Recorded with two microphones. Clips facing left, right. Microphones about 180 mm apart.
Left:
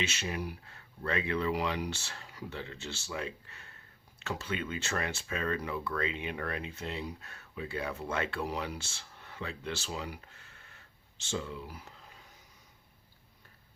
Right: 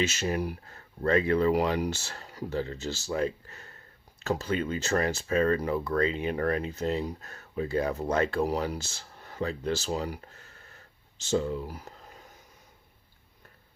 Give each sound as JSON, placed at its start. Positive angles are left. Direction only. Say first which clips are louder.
{"t": 0.0, "sound": "speech", "louder": "right 7 dB", "side_deg": -40}